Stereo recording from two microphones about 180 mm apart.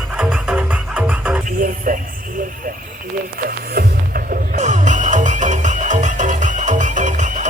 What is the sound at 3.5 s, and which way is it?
Music, 55° right (ahead or behind).